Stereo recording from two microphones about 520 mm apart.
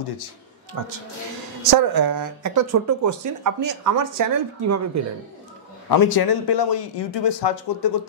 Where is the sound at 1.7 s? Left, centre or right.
Right.